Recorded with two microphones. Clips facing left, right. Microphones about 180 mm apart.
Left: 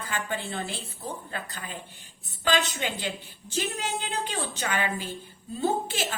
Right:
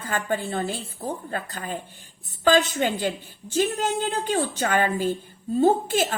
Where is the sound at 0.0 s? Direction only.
45° right (ahead or behind).